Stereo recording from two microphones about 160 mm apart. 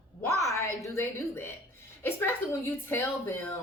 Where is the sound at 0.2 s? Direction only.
20° left (ahead or behind).